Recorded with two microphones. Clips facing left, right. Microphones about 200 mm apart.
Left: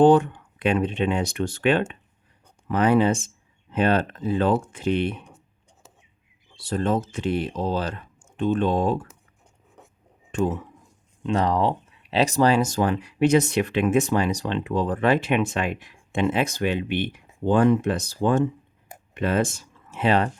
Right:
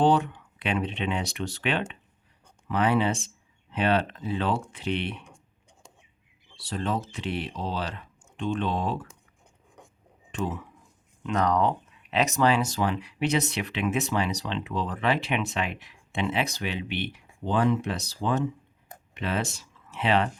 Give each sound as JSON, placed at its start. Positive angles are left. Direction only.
{"t": 0.0, "sound": "speech", "side_deg": 50}
{"t": 6.6, "sound": "speech", "side_deg": 45}
{"t": 10.3, "sound": "speech", "side_deg": 45}
{"t": 11.2, "sound": "speech", "side_deg": 30}